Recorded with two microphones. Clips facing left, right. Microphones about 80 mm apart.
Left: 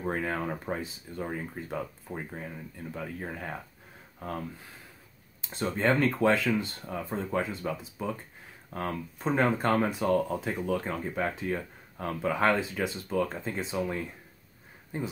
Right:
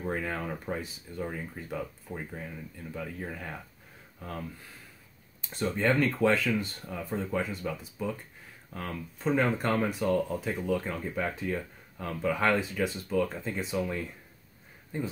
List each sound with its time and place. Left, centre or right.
0.0 s speech: left
5.5 s speech: left
9.2 s speech: left